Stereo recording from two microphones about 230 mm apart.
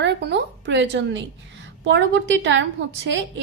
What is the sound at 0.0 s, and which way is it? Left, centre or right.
A woman's voice, right.